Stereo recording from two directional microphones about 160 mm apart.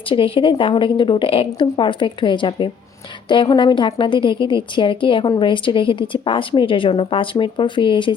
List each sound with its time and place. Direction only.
0.1 s a woman's voice: 30° left (ahead or behind)